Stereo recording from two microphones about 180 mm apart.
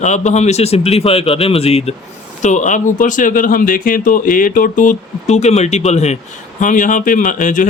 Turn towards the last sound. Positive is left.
turn(degrees=45)  # may be behind; listen again after turning